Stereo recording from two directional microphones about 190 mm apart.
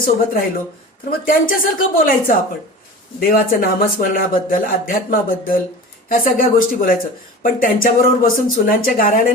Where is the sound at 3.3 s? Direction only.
45° left (ahead or behind).